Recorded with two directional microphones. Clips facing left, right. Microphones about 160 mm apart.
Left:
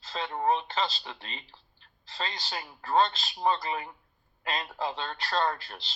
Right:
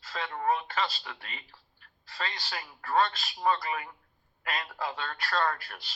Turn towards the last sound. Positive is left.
turn(degrees=25)  # may be behind; listen again after turning